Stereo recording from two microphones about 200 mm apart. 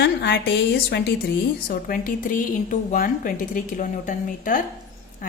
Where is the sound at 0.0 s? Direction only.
55° left (ahead or behind).